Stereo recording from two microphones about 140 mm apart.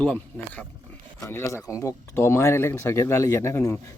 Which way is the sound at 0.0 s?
10° left (ahead or behind).